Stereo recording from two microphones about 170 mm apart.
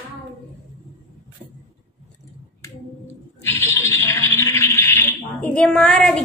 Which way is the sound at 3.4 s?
15° left (ahead or behind).